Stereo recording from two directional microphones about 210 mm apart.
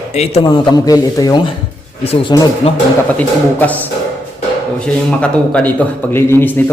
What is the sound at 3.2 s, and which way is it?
A man's voice, 10° left (ahead or behind).